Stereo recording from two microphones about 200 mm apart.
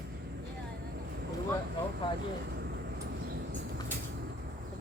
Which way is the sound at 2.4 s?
55° right (ahead or behind).